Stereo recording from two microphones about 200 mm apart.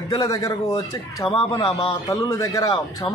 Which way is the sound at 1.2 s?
30° left (ahead or behind).